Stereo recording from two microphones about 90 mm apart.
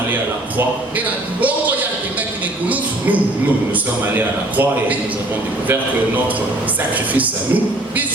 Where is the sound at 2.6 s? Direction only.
20° right (ahead or behind).